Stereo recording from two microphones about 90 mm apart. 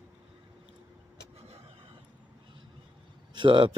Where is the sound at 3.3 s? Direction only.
65° right (ahead or behind).